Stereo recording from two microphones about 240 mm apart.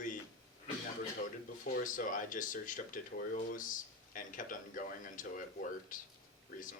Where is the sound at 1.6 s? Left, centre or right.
Left.